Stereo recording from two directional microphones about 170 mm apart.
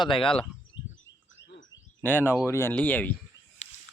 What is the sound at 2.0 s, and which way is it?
Speech, 10° left (ahead or behind).